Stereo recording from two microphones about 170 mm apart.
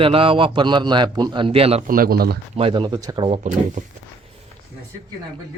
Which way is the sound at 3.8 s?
50° right (ahead or behind).